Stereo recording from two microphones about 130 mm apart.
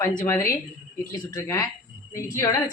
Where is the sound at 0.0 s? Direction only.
30° left (ahead or behind).